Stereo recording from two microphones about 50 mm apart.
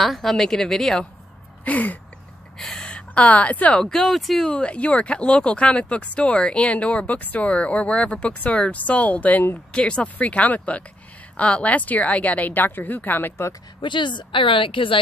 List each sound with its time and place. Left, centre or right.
0.0 s a woman's voice: centre
1.6 s a sound: left
2.6 s speech: centre
3.8 s a woman's voice: centre
4.5 s a woman's voice: left